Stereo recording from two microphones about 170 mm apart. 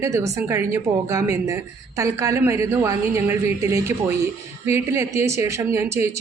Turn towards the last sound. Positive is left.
turn(degrees=-15)  # may be behind; listen again after turning